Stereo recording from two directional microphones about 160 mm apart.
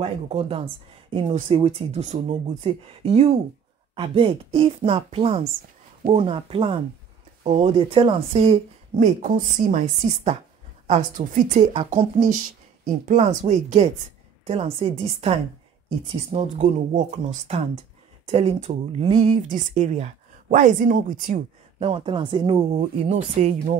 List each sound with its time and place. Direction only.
0.0 s speech: 40° right (ahead or behind)
11.7 s speech: 40° right (ahead or behind)
18.3 s speech: 40° right (ahead or behind)
19.4 s speech: 50° right (ahead or behind)
21.7 s speech: 35° right (ahead or behind)